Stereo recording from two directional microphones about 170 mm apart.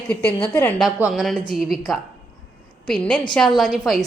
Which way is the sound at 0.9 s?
10° right (ahead or behind).